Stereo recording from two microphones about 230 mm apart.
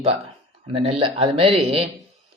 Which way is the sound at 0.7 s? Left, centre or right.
Right.